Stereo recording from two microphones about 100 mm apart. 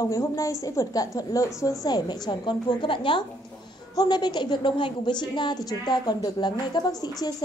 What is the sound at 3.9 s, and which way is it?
A woman's voice, 45° left (ahead or behind).